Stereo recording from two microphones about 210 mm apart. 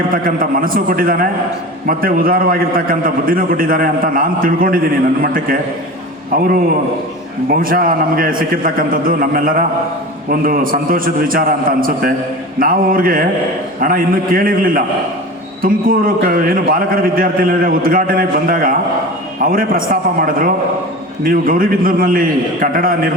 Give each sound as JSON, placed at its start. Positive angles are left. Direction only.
{"t": 0.1, "sound": "a man's voice", "side_deg": -40}